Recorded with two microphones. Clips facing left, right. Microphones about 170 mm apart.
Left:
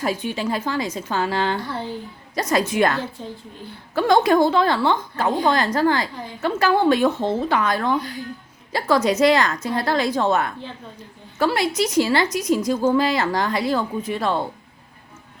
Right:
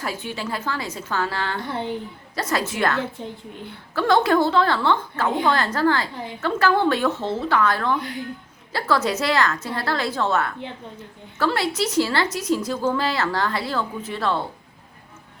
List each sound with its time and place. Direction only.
0.0 s a woman's voice: 20° left (ahead or behind)
1.6 s a woman's voice: 20° right (ahead or behind)
2.3 s a woman's voice: 15° left (ahead or behind)
3.2 s a woman's voice: 20° right (ahead or behind)
3.9 s a woman's voice: 15° left (ahead or behind)